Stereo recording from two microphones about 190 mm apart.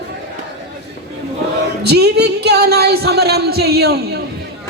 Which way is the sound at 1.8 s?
60° right (ahead or behind).